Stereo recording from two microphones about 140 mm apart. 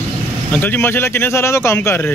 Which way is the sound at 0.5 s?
15° left (ahead or behind).